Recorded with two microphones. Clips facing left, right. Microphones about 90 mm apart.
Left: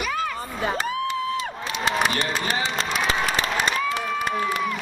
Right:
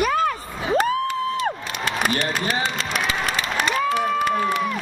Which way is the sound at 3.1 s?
40° left (ahead or behind).